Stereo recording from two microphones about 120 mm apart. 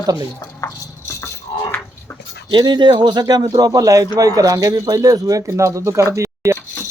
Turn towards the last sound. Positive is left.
turn(degrees=-25)  # may be behind; listen again after turning